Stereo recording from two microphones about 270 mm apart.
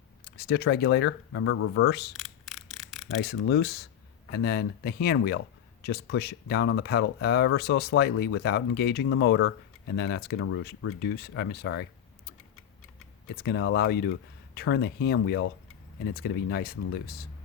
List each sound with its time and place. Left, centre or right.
0.3 s speech: left
2.1 s a sound: centre
3.2 s speech: left